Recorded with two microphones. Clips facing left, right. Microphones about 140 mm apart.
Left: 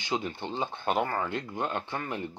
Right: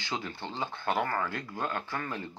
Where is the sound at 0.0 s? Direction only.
20° left (ahead or behind).